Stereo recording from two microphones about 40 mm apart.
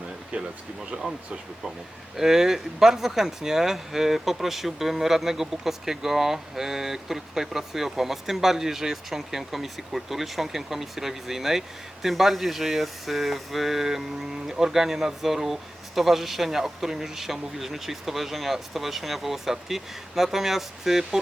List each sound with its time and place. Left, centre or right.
0.3 s speech: right
2.1 s speech: centre